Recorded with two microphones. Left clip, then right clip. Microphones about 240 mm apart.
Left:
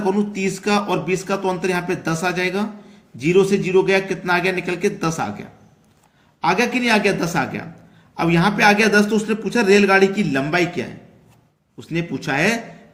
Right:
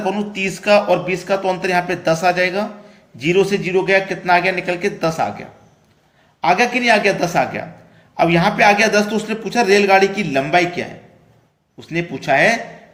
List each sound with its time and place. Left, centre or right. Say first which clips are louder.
0.0 s speech: even; centre